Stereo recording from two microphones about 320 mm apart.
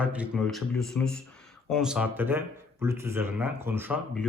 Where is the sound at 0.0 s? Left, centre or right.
Centre.